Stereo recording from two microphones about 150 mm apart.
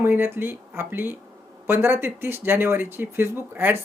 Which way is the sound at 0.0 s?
15° right (ahead or behind).